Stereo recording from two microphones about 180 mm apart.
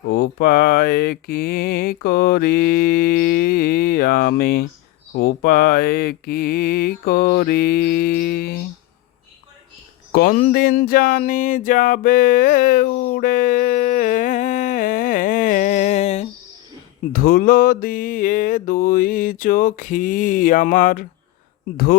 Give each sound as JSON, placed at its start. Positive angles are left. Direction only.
{"t": 0.1, "sound": "mantra", "side_deg": 60}
{"t": 10.1, "sound": "a sound", "side_deg": 55}
{"t": 17.1, "sound": "music", "side_deg": 50}